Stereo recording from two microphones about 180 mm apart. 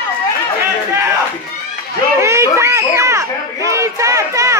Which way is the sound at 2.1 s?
15° right (ahead or behind).